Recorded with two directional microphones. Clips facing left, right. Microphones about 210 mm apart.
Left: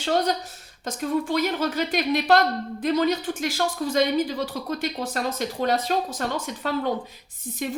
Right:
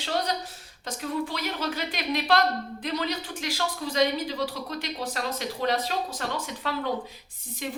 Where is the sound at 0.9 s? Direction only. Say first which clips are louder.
Left 5 dB; 45° left (ahead or behind).